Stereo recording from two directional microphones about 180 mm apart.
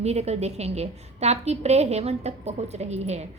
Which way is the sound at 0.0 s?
35° right (ahead or behind).